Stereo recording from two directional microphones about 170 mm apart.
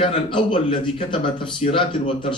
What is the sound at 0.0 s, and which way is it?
A woman's voice, 30° left (ahead or behind).